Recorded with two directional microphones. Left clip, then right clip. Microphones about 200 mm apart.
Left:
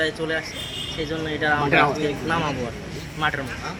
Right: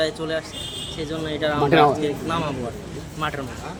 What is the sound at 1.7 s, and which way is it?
Speech, 60° right (ahead or behind).